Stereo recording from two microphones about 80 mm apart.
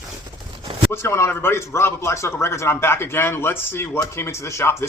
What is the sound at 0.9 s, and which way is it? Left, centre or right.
Speech, left.